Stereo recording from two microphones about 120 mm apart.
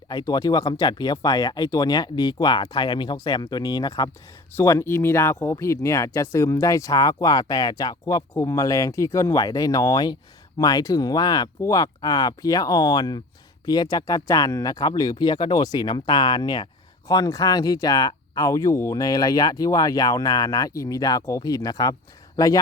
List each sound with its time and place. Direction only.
0.1 s speech: 35° left (ahead or behind)
4.5 s speech: 20° left (ahead or behind)